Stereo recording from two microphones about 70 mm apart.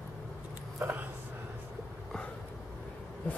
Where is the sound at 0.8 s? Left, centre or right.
Right.